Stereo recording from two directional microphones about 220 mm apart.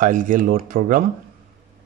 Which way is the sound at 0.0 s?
35° right (ahead or behind).